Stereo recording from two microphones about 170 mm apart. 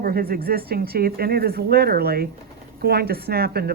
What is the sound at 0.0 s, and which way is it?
A woman's voice, 60° right (ahead or behind).